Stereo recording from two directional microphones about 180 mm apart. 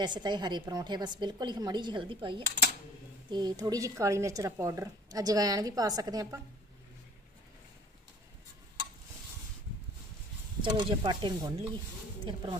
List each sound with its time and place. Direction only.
0.0 s a woman's voice: 25° right (ahead or behind)
10.6 s a woman's voice: 25° right (ahead or behind)